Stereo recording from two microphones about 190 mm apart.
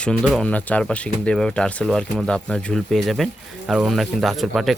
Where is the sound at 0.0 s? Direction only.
5° left (ahead or behind).